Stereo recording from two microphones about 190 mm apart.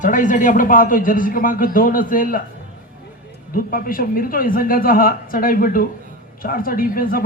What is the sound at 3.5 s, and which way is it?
A man's voice, 50° left (ahead or behind).